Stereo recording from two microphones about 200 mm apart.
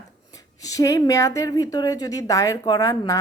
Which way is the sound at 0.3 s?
15° left (ahead or behind).